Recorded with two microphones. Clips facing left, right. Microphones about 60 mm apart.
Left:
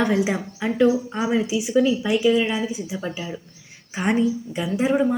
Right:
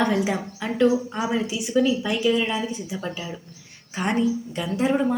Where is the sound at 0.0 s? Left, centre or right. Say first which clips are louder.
Left 1 dB; centre.